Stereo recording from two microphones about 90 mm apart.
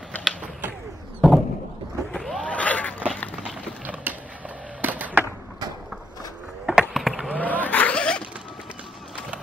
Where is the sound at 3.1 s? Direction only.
15° left (ahead or behind).